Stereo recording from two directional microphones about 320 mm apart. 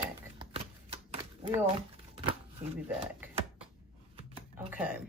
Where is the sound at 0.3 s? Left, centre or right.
Centre.